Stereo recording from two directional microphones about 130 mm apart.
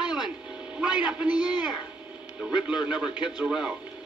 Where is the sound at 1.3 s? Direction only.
35° left (ahead or behind).